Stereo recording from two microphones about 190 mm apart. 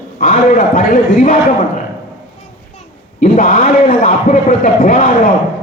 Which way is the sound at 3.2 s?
45° left (ahead or behind).